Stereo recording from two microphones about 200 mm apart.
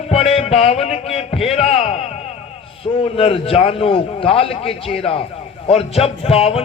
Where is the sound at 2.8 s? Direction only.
25° left (ahead or behind).